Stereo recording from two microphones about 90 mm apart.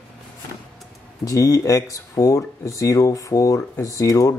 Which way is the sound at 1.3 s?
40° left (ahead or behind).